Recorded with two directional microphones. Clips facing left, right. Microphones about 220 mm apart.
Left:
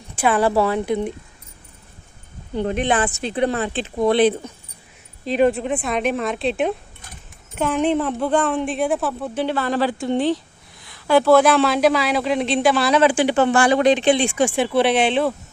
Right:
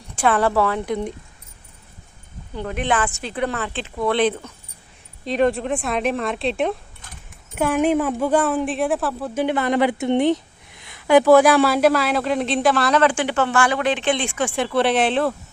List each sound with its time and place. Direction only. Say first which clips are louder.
0.2 s a woman's voice: left 1 dB; 10° left (ahead or behind)
2.6 s speech: left 3 dB; 20° left (ahead or behind); by 6.7 s centre (ahead or behind)
7.5 s a woman's voice: right 1 dB; 10° right (ahead or behind); by 13.6 s 15° left (ahead or behind)
13.6 s speech: left 3 dB; 30° left (ahead or behind)
14.0 s speech: left 5 dB; 10° left (ahead or behind)